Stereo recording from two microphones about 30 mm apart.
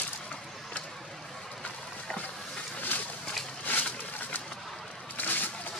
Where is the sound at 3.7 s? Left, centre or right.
Left.